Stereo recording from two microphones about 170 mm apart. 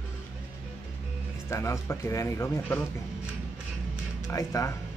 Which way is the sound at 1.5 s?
15° left (ahead or behind).